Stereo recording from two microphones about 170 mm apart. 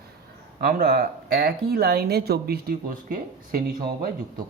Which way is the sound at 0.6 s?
65° right (ahead or behind).